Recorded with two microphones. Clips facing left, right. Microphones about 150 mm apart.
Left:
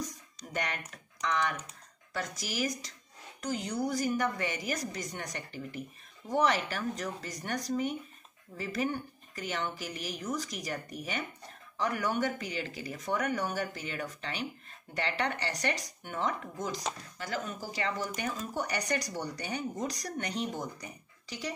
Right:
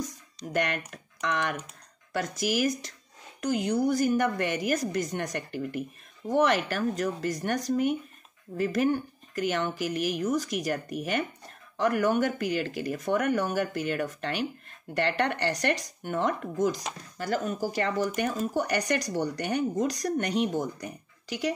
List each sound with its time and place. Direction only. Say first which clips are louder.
0.5 s speech: right 7 dB; 70° right (ahead or behind)
17.2 s speech: right 9 dB; 45° right (ahead or behind); by 21.5 s 65° right (ahead or behind)